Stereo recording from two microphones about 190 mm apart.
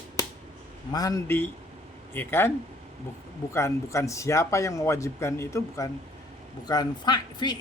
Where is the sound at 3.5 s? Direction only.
15° left (ahead or behind).